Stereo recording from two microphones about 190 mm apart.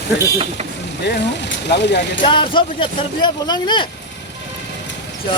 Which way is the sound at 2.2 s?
25° left (ahead or behind).